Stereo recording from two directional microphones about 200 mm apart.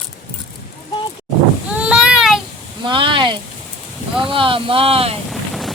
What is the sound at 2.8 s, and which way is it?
Speech, 25° right (ahead or behind).